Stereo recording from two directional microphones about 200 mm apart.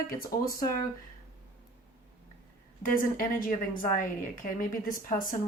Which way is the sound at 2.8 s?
45° left (ahead or behind).